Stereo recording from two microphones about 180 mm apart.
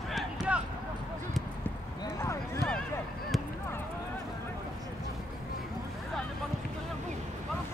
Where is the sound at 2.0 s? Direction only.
15° left (ahead or behind).